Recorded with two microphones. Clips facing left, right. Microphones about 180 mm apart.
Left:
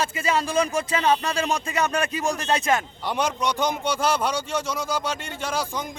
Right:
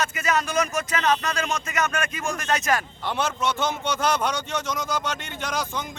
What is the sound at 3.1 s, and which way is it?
A man's voice, 15° left (ahead or behind).